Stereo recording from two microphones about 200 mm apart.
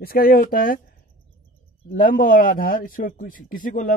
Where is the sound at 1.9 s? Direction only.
45° left (ahead or behind).